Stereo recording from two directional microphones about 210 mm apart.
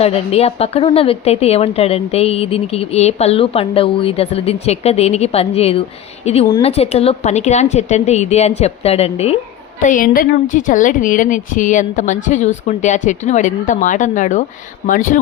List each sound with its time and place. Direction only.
0.0 s a woman's voice: 30° left (ahead or behind)
9.8 s a woman's voice: 40° left (ahead or behind)